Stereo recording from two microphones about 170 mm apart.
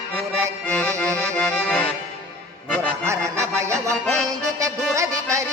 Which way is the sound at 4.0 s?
5° left (ahead or behind).